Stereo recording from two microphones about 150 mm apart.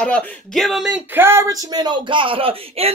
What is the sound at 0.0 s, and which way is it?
Speech, 5° left (ahead or behind).